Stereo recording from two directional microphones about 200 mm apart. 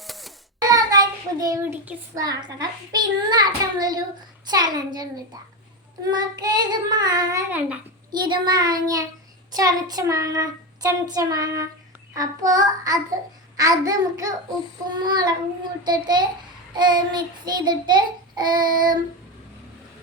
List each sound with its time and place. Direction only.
0.0 s a sound: centre (ahead or behind)
0.7 s child singing: 20° right (ahead or behind)
1.8 s child singing: 10° right (ahead or behind)
2.2 s child singing: 20° right (ahead or behind)